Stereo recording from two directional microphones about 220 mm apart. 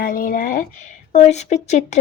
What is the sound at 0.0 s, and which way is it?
A woman's voice, 40° left (ahead or behind).